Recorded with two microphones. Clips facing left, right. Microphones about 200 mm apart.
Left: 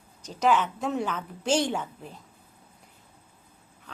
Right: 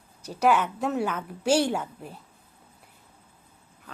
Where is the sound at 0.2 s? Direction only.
10° right (ahead or behind).